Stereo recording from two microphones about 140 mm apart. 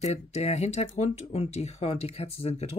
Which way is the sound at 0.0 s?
50° left (ahead or behind).